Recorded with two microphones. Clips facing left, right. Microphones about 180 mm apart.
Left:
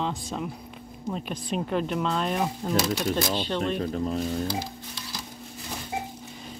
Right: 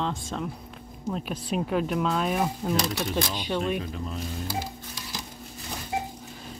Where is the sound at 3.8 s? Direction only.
40° left (ahead or behind).